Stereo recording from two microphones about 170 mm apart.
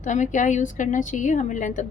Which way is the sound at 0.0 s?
45° left (ahead or behind).